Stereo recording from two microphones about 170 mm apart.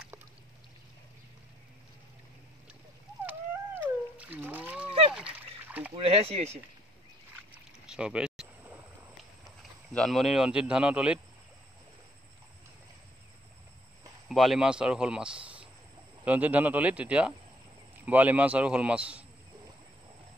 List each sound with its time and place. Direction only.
3.3 s cat: 10° right (ahead or behind)
5.1 s splash: 5° right (ahead or behind)
5.9 s speech: 35° right (ahead or behind)
7.5 s rowboat: 5° right (ahead or behind)
9.6 s speech: centre (ahead or behind)
14.3 s a man's voice: centre (ahead or behind)